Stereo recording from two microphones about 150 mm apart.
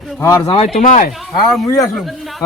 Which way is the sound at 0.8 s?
65° left (ahead or behind).